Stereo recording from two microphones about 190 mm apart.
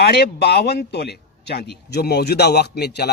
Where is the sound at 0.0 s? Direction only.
60° left (ahead or behind).